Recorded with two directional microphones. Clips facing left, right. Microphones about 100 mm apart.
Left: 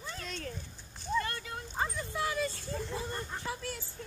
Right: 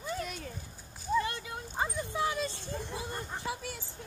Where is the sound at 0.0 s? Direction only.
10° right (ahead or behind).